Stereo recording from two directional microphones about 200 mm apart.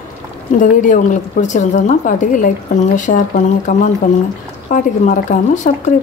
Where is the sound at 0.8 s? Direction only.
40° left (ahead or behind).